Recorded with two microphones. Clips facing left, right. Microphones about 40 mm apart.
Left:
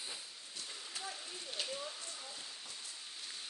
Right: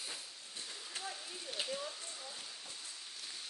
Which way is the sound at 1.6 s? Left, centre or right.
Right.